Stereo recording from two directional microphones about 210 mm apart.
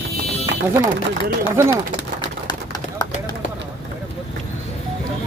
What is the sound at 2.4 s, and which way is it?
Bird, 20° left (ahead or behind).